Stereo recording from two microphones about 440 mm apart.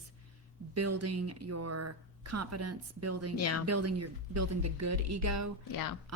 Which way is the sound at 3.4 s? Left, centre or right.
Left.